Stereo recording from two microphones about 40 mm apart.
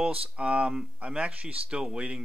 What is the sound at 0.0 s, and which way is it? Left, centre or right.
Speech, right.